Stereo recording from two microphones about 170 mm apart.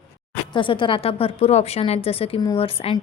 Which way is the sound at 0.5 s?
30° left (ahead or behind).